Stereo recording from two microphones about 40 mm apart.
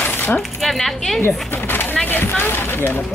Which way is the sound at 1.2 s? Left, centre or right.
Left.